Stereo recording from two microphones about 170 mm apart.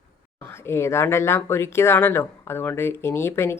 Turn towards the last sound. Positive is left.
turn(degrees=15)  # may be behind; listen again after turning